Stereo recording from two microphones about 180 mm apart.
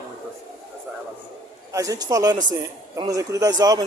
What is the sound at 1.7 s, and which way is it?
Speech, 20° right (ahead or behind).